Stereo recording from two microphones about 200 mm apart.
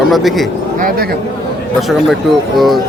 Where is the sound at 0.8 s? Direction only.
45° right (ahead or behind).